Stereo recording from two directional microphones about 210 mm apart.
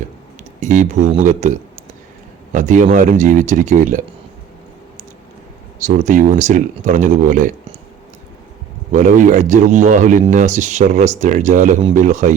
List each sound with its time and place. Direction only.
0.6 s speech: 35° right (ahead or behind)
5.8 s speech: 35° right (ahead or behind)
8.9 s speech: 35° right (ahead or behind)